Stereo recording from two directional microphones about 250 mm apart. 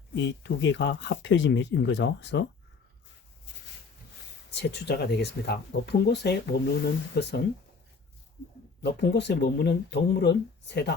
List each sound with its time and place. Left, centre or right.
0.1 s speech: left
4.5 s speech: left
8.8 s speech: left